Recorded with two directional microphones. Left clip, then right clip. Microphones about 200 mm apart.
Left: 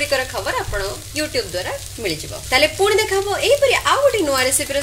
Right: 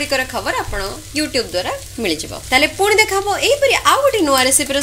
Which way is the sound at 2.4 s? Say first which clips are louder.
Right 2 dB; 20° right (ahead or behind).